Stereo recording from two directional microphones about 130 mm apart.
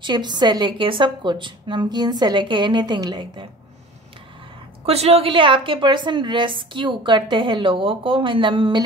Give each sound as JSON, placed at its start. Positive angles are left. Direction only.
{"t": 0.0, "sound": "a woman's voice", "side_deg": -35}
{"t": 4.8, "sound": "a woman's voice", "side_deg": -50}